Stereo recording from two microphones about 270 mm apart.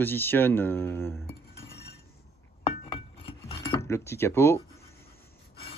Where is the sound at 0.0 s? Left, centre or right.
Centre.